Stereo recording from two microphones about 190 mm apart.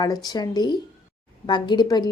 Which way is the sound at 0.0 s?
20° left (ahead or behind).